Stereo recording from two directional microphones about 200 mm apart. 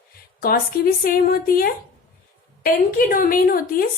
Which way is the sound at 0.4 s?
45° left (ahead or behind).